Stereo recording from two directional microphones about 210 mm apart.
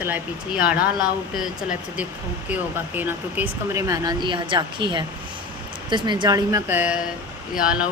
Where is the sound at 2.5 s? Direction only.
10° right (ahead or behind).